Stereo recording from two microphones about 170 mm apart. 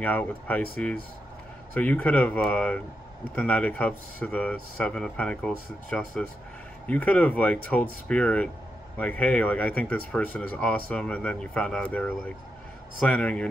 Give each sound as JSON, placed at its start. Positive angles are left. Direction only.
{"t": 0.0, "sound": "speech", "side_deg": 10}